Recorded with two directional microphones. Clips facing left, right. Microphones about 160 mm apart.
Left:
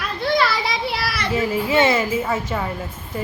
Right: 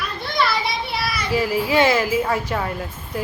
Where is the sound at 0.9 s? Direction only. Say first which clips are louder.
Even; 80° left.